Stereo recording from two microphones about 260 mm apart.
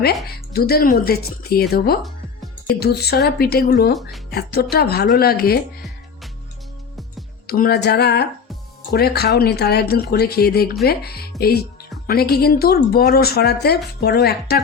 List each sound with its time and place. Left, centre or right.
0.3 s speech: left
7.4 s speech: left